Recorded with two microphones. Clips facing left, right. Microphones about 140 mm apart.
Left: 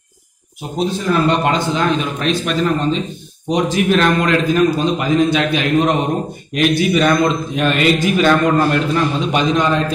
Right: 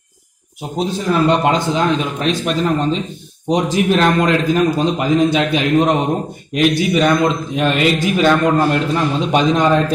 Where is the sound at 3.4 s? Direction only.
30° right (ahead or behind).